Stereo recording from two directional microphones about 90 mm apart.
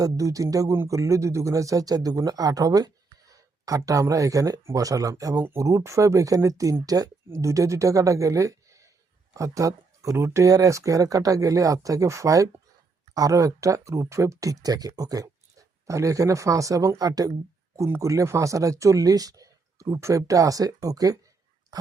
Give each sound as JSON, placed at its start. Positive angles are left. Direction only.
{"t": 0.0, "sound": "speech", "side_deg": -40}
{"t": 17.7, "sound": "speech", "side_deg": -30}